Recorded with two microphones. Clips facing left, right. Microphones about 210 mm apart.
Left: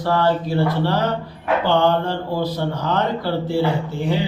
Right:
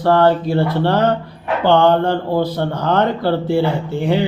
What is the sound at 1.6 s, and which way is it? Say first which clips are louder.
Speech: right 6 dB; 55° right (ahead or behind).